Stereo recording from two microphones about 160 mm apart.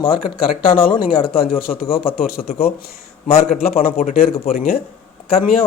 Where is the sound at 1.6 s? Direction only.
65° left (ahead or behind).